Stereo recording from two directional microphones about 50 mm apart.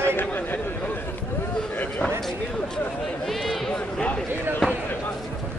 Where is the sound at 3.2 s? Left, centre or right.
Centre.